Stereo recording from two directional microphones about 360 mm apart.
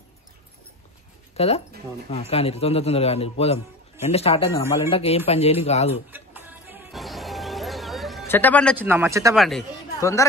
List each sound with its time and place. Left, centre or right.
1.3 s speech: centre
6.0 s music: centre